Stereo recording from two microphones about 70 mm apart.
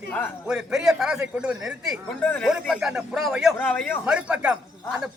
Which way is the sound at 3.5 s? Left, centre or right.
Left.